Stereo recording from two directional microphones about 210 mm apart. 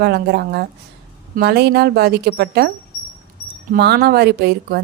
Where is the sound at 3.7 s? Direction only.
50° right (ahead or behind).